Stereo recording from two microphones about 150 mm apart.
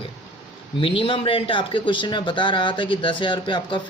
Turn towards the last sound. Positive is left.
turn(degrees=30)  # may be behind; listen again after turning